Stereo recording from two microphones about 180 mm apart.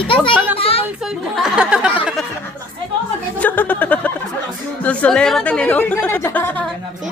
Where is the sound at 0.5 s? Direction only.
30° left (ahead or behind).